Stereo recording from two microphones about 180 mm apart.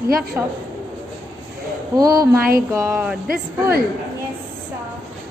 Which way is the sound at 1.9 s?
20° right (ahead or behind).